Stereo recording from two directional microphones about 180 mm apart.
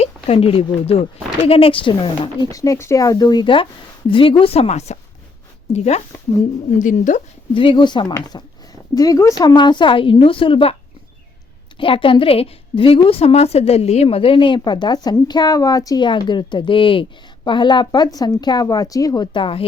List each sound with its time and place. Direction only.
0.0 s a woman's voice: 35° left (ahead or behind)
7.5 s a woman's voice: 30° left (ahead or behind)
11.8 s a woman's voice: 30° left (ahead or behind)